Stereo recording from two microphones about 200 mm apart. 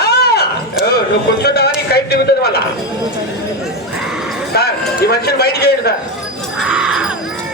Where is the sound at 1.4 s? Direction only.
55° left (ahead or behind).